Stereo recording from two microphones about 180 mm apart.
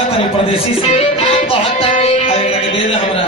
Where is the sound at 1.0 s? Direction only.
30° left (ahead or behind).